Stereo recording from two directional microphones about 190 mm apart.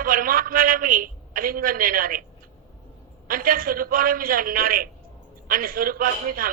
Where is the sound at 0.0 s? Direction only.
50° right (ahead or behind).